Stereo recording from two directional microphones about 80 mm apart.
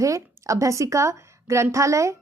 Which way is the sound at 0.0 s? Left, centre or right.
Right.